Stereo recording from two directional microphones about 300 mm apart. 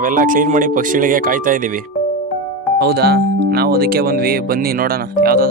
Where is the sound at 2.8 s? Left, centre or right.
Right.